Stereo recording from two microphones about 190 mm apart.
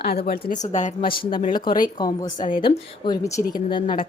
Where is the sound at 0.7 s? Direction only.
40° left (ahead or behind).